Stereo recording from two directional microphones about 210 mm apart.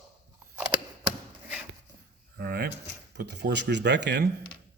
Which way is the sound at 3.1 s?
50° right (ahead or behind).